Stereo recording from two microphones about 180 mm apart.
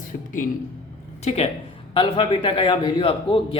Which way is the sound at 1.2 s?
35° left (ahead or behind).